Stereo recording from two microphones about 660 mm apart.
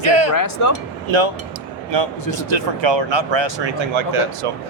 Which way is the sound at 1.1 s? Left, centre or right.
Right.